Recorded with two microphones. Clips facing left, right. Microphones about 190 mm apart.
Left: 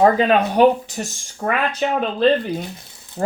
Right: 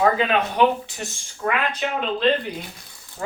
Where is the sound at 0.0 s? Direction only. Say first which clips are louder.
Left 5 dB; 40° left (ahead or behind).